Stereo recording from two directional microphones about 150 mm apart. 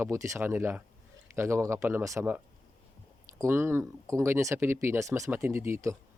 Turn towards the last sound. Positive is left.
turn(degrees=-20)  # may be behind; listen again after turning